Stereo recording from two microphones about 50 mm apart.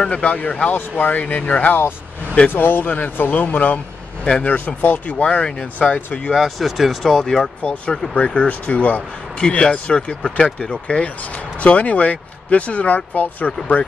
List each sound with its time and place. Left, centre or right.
0.0 s speech: left
2.5 s speech: left
5.1 s speech: left
6.4 s speech: centre
7.6 s speech: left
9.4 s speech: centre